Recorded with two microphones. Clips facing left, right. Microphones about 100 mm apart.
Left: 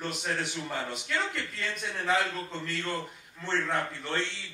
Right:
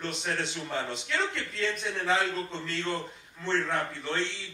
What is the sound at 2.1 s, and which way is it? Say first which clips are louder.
Speech: even; 20° right (ahead or behind).